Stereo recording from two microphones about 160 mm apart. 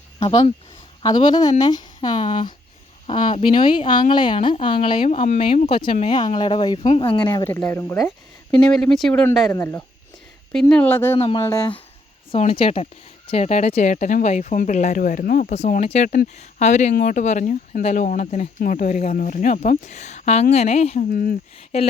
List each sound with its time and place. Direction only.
0.2 s speech: 35° left (ahead or behind)
5.0 s speech: 45° left (ahead or behind)
7.6 s speech: 15° left (ahead or behind)
8.5 s speech: 5° left (ahead or behind)
9.5 s speech: 15° left (ahead or behind)
10.5 s speech: 5° left (ahead or behind)
11.3 s speech: 25° left (ahead or behind)
12.3 s a woman's voice: 40° left (ahead or behind)
16.9 s a woman's voice: 55° left (ahead or behind); by 21.0 s 40° left (ahead or behind)
21.1 s speech: 65° left (ahead or behind)
21.7 s speech: 40° left (ahead or behind)